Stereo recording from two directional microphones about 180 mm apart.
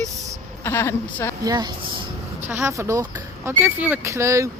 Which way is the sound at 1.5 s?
20° right (ahead or behind).